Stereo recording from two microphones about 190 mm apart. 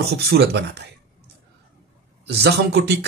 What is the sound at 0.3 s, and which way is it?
Speech, 65° right (ahead or behind).